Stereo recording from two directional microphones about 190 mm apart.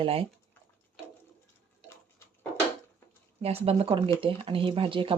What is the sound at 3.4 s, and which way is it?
Speech, 30° right (ahead or behind).